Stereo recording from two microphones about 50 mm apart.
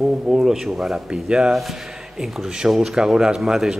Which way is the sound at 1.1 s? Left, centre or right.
Centre.